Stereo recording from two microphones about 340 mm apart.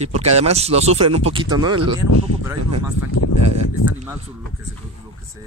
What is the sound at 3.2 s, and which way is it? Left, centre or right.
Speech, left.